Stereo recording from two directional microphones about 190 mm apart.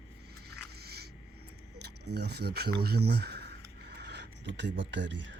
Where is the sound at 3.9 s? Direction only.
60° right (ahead or behind).